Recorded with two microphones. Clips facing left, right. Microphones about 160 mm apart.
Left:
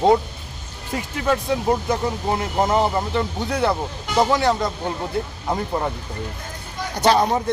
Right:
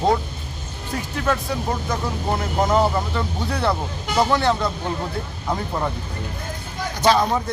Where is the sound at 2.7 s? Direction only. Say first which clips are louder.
Even; 15° left (ahead or behind).